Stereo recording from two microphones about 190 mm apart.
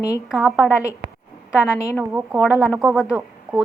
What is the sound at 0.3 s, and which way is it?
Speech, 5° right (ahead or behind).